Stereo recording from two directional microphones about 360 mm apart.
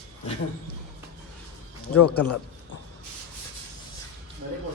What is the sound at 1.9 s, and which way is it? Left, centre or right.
Speech, left.